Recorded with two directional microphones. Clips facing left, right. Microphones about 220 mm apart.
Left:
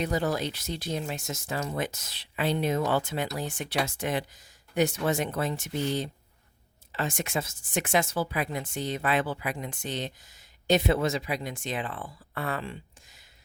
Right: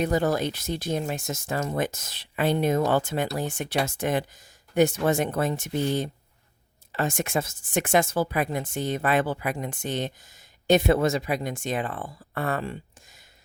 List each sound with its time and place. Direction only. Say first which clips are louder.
0.0 s speech: right 4 dB; 50° right (ahead or behind)